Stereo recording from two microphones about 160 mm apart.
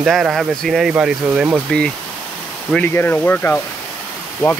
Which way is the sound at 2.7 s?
10° left (ahead or behind).